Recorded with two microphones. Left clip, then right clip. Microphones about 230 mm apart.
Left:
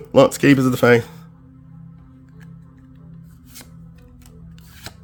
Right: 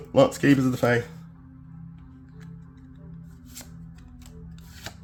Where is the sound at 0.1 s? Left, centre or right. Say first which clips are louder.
Left 6 dB; left.